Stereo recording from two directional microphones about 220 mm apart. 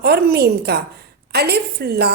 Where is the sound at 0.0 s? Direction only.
45° right (ahead or behind).